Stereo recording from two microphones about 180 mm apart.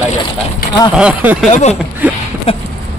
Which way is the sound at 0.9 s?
5° right (ahead or behind).